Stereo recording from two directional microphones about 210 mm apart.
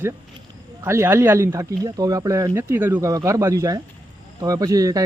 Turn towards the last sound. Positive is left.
turn(degrees=-15)  # may be behind; listen again after turning